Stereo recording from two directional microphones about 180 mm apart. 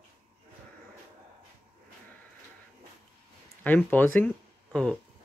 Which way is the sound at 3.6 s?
10° left (ahead or behind).